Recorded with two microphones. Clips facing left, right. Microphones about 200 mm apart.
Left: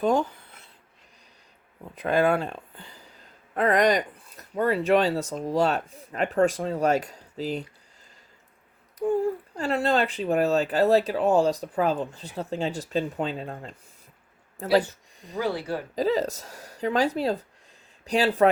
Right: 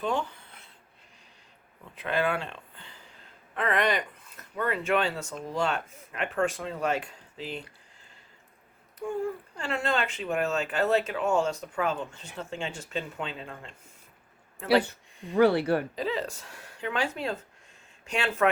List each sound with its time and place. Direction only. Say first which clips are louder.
0.0 s speech: left 7 dB; 40° left (ahead or behind)
1.8 s speech: left 6 dB; 40° left (ahead or behind)
9.0 s speech: left 7 dB; 35° left (ahead or behind)
15.4 s speech: right 6 dB; 65° right (ahead or behind)
16.0 s speech: left 7 dB; 40° left (ahead or behind)